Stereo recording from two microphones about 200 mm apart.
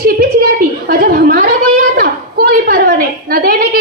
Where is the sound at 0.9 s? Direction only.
50° right (ahead or behind).